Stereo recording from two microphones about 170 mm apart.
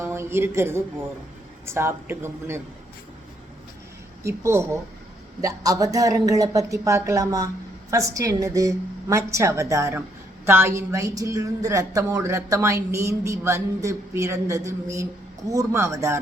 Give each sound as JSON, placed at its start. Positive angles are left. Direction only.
{"t": 0.0, "sound": "a woman's voice", "side_deg": -15}
{"t": 4.2, "sound": "a woman's voice", "side_deg": -15}